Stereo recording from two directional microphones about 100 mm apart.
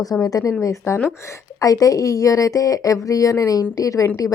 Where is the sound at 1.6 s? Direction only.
35° left (ahead or behind).